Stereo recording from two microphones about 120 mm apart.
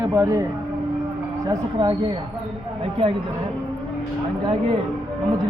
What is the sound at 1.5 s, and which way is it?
Speech, 35° right (ahead or behind).